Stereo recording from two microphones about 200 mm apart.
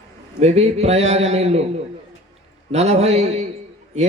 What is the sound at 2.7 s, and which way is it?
Speech, 30° right (ahead or behind).